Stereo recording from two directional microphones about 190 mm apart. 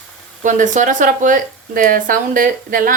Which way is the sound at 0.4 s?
40° right (ahead or behind).